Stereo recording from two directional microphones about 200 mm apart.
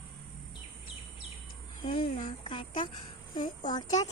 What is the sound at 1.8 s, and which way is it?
Speech, 25° left (ahead or behind).